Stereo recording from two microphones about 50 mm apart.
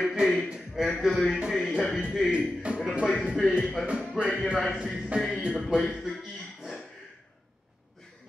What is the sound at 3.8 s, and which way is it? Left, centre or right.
Speech, centre.